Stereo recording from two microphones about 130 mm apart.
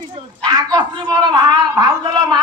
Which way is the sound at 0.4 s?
30° right (ahead or behind).